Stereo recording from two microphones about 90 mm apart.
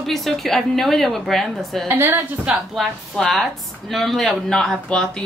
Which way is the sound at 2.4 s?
5° right (ahead or behind).